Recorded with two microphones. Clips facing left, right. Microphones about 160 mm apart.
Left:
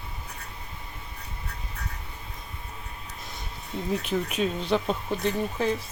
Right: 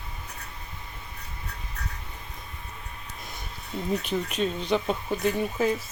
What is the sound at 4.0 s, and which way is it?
Speech, 5° left (ahead or behind).